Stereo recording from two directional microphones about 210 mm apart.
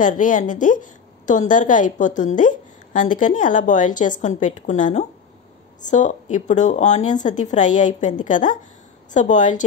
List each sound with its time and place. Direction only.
0.0 s a woman's voice: 40° left (ahead or behind)